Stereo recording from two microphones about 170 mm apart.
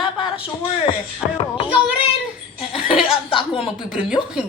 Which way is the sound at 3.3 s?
30° left (ahead or behind).